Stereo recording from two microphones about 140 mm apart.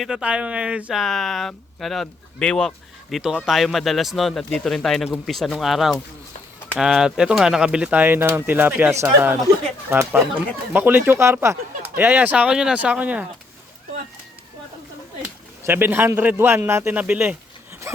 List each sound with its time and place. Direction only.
0.0 s speech: 5° right (ahead or behind)
15.6 s speech: 15° right (ahead or behind)
17.9 s a sound: 20° right (ahead or behind)